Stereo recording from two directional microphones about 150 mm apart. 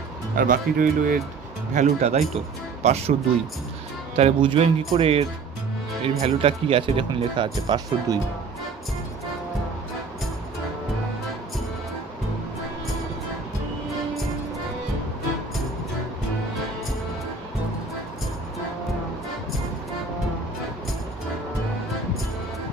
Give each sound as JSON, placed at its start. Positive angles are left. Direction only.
{"t": 0.4, "sound": "speech", "side_deg": -65}
{"t": 1.7, "sound": "speech", "side_deg": -55}